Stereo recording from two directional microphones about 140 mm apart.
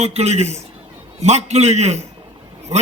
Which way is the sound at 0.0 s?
50° right (ahead or behind).